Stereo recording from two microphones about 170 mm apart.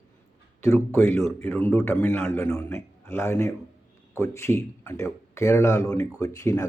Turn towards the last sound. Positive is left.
turn(degrees=20)  # may be behind; listen again after turning